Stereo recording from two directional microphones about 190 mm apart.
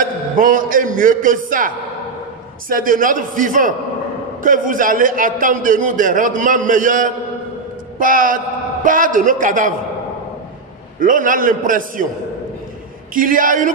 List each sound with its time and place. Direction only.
0.0 s a man's voice: 45° right (ahead or behind)
2.7 s a man's voice: 45° right (ahead or behind)
11.0 s a man's voice: 45° right (ahead or behind)
13.1 s a man's voice: 45° right (ahead or behind)